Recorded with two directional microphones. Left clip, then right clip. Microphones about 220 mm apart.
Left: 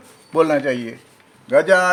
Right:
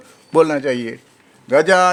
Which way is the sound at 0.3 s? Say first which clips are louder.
Right 2 dB; 50° right (ahead or behind).